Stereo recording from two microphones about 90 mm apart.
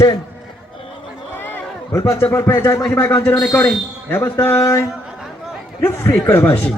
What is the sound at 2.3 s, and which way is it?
Speech, 30° left (ahead or behind).